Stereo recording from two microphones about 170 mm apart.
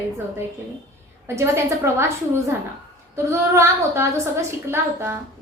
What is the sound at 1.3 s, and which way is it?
Speech, 15° right (ahead or behind).